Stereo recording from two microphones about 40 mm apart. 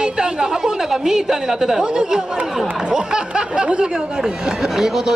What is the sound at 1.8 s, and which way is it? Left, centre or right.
Speech, centre.